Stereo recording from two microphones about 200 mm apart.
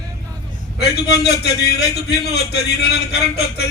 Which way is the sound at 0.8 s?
55° left (ahead or behind).